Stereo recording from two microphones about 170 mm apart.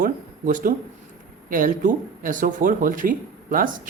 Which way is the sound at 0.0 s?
55° right (ahead or behind).